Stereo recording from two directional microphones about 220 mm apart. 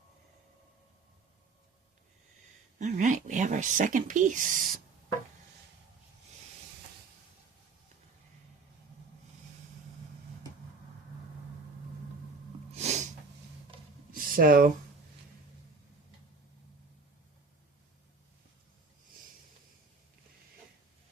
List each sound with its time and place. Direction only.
2.7 s speech: 35° right (ahead or behind)
12.7 s sneeze: 30° right (ahead or behind)
14.1 s a sound: 40° right (ahead or behind)